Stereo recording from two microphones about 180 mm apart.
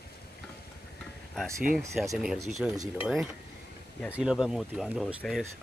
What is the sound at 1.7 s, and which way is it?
Speech, 50° right (ahead or behind).